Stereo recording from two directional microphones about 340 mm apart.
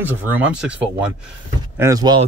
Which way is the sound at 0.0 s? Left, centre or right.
Centre.